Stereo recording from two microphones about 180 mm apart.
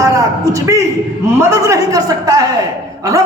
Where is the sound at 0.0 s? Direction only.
15° right (ahead or behind).